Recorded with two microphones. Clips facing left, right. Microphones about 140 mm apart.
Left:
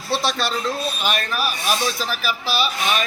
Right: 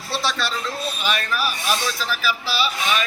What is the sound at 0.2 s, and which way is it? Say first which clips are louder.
Speech: left 2 dB; 55° left (ahead or behind).